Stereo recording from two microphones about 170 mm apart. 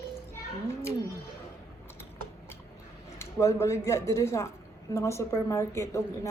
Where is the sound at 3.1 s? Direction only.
15° left (ahead or behind).